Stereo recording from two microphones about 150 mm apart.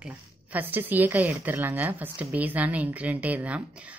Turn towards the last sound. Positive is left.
turn(degrees=-10)  # may be behind; listen again after turning